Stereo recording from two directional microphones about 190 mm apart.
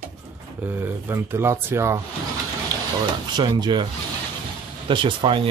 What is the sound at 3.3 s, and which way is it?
Speech, 20° right (ahead or behind).